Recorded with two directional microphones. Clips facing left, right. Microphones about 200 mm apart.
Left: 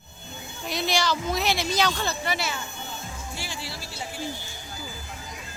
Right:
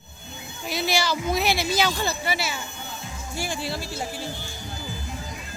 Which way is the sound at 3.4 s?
55° right (ahead or behind).